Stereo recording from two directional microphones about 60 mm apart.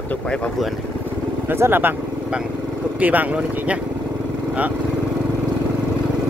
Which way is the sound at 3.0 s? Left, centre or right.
Right.